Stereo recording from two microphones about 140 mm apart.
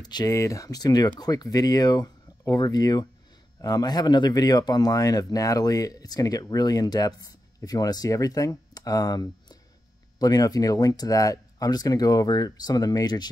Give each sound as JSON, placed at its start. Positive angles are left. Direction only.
{"t": 0.0, "sound": "speech", "side_deg": 30}